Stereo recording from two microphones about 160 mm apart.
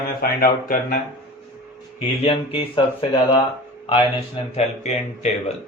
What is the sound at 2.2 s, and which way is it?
Speech, 35° left (ahead or behind).